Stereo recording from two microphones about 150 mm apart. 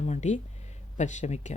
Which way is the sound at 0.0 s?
50° left (ahead or behind).